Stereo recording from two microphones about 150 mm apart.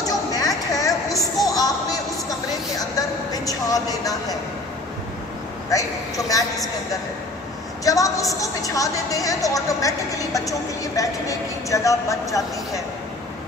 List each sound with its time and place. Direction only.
0.0 s a sound: 25° left (ahead or behind)
5.7 s a woman's voice: 25° left (ahead or behind)
7.8 s a woman's voice: 20° left (ahead or behind)